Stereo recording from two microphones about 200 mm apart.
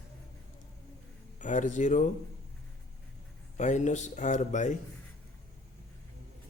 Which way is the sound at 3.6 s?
35° left (ahead or behind).